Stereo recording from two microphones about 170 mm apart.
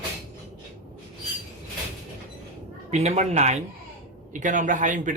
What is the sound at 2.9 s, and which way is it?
A man's voice, 40° right (ahead or behind).